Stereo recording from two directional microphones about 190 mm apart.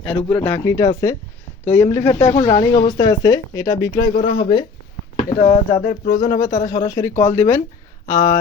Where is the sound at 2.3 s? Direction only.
35° left (ahead or behind).